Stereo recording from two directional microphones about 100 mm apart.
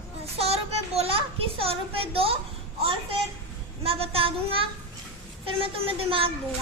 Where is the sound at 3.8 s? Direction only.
70° right (ahead or behind).